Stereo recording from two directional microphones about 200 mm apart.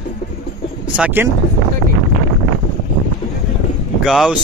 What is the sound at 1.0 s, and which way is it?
Speech, 10° right (ahead or behind).